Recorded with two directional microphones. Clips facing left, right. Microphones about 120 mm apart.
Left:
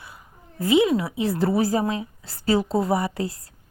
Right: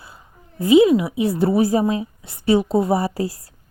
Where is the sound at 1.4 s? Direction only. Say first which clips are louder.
Right 4 dB; 25° right (ahead or behind).